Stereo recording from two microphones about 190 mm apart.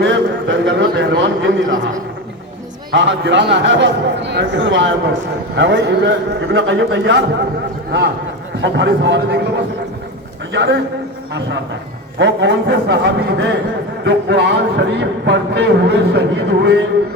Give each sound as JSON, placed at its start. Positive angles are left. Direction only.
{"t": 0.0, "sound": "a man's voice", "side_deg": -75}
{"t": 2.9, "sound": "speech", "side_deg": -70}
{"t": 8.6, "sound": "speech", "side_deg": -70}
{"t": 10.5, "sound": "speech", "side_deg": -70}
{"t": 12.2, "sound": "speech", "side_deg": -70}